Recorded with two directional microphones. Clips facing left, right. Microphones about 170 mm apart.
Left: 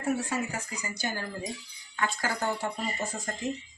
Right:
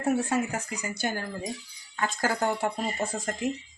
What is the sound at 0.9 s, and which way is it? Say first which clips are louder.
Speech: right 3 dB; 50° right (ahead or behind).